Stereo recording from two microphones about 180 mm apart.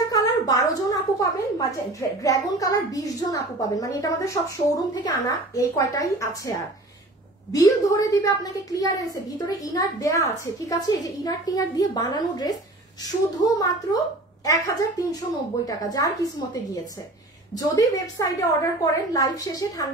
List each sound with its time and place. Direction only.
0.1 s a woman's voice: 20° left (ahead or behind)
17.6 s a woman's voice: 20° left (ahead or behind)